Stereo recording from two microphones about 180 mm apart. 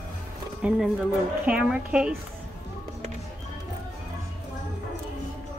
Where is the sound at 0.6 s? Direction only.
5° right (ahead or behind).